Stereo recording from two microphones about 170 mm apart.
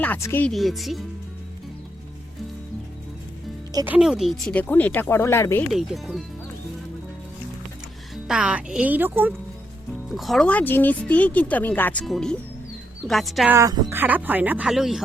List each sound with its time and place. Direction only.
0.0 s speech: 10° left (ahead or behind)
0.5 s speech: centre (ahead or behind)
3.8 s speech: 5° right (ahead or behind)
4.5 s speech: 10° left (ahead or behind)
5.7 s speech: centre (ahead or behind)
8.1 s speech: 5° right (ahead or behind)
10.1 s speech: centre (ahead or behind)
13.5 s speech: 20° right (ahead or behind); by 15.0 s centre (ahead or behind)